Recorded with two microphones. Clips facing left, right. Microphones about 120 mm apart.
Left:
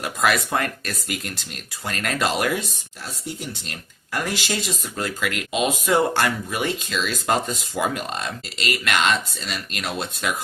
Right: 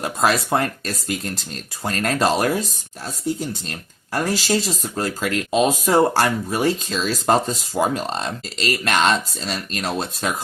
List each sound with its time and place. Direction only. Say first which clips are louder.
0.0 s speech: right 2 dB; 30° right (ahead or behind)